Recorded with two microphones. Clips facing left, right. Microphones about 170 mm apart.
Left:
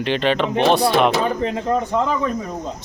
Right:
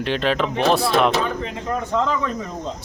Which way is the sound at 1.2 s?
40° left (ahead or behind).